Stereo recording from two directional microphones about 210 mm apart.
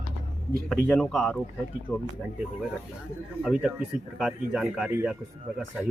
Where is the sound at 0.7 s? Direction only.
10° left (ahead or behind).